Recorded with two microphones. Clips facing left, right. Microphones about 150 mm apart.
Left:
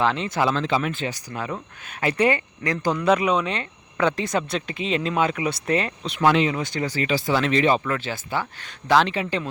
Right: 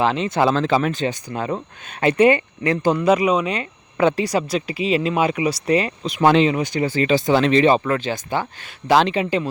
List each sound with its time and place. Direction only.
0.0 s speech: 20° right (ahead or behind)
0.3 s speech: 35° right (ahead or behind); by 3.0 s 20° right (ahead or behind)
3.0 s speech: 5° right (ahead or behind)
6.2 s speech: 25° right (ahead or behind)